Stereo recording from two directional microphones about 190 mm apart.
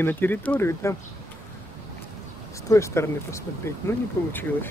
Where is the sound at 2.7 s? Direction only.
15° left (ahead or behind).